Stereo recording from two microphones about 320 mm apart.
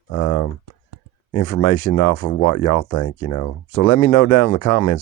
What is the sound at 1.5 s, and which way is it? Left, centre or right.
Speech, left.